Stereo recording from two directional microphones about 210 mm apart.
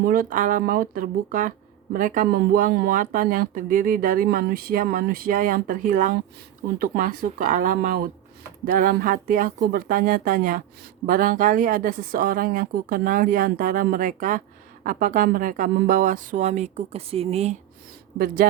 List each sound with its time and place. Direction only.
0.0 s speech: 40° right (ahead or behind)